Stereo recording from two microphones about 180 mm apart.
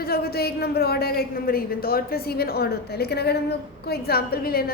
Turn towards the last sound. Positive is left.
turn(degrees=55)  # may be behind; listen again after turning